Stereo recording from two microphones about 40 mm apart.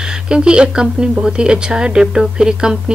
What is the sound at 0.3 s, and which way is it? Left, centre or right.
A woman's voice, right.